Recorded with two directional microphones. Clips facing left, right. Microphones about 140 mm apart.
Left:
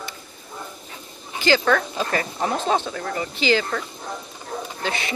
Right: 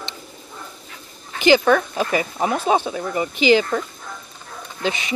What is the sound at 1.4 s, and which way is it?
Speech, 15° right (ahead or behind).